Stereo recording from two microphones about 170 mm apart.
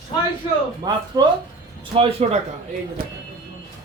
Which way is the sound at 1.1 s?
25° right (ahead or behind).